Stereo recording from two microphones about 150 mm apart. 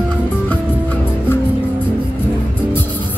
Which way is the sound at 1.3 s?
15° left (ahead or behind).